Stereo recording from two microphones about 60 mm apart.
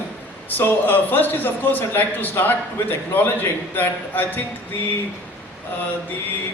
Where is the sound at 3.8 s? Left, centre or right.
Left.